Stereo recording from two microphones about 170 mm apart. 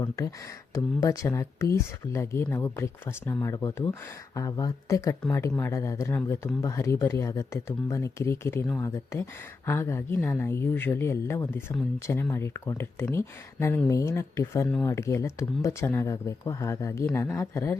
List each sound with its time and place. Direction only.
0.0 s speech: 20° left (ahead or behind)